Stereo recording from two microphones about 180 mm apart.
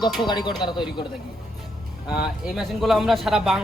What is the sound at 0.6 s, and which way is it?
Speech, 25° left (ahead or behind).